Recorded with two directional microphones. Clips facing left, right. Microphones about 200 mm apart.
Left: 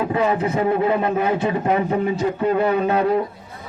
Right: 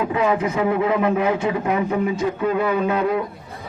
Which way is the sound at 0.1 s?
35° left (ahead or behind).